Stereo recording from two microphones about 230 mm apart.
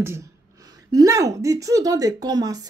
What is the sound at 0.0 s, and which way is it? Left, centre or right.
A woman's voice, centre.